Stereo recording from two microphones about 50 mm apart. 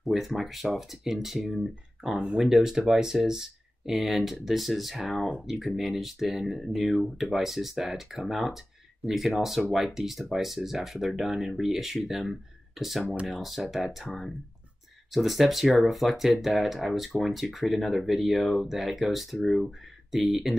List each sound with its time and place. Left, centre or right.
0.0 s speech: centre
2.1 s speech: centre
2.4 s speech: centre